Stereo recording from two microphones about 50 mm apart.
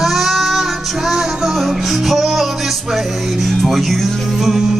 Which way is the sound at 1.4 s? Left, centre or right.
Centre.